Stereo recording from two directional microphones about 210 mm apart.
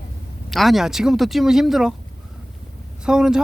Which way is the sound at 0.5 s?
Centre (ahead or behind).